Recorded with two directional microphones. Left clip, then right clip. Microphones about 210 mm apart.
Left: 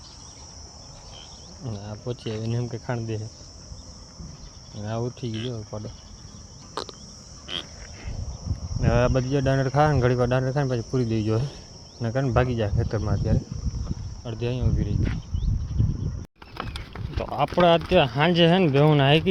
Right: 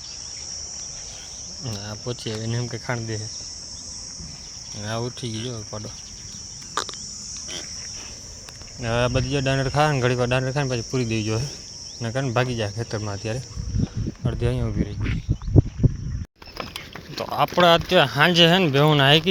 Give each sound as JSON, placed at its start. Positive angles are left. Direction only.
{"t": 1.6, "sound": "cricket", "side_deg": 5}
{"t": 4.8, "sound": "cricket", "side_deg": 10}
{"t": 6.8, "sound": "a sound", "side_deg": 15}
{"t": 8.8, "sound": "cricket", "side_deg": 15}
{"t": 14.3, "sound": "speech", "side_deg": -20}
{"t": 17.2, "sound": "cricket", "side_deg": 10}